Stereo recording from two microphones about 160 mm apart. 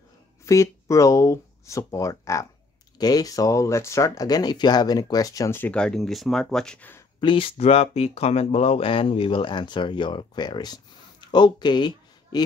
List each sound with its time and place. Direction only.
0.5 s speech: 20° left (ahead or behind)
7.2 s speech: 30° left (ahead or behind)